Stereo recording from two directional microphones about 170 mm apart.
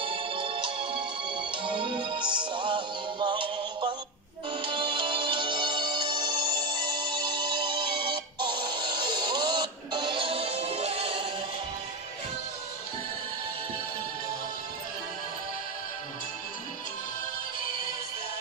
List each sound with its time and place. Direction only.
0.0 s music: 30° right (ahead or behind)